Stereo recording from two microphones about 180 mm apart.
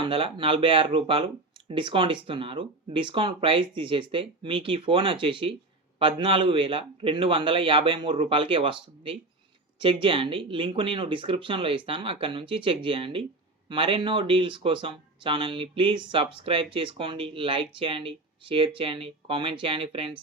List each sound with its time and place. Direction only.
0.0 s speech: 30° right (ahead or behind)